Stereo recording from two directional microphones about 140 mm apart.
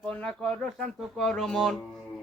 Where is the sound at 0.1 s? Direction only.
5° left (ahead or behind).